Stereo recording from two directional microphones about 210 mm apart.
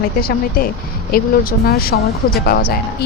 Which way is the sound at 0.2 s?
45° left (ahead or behind).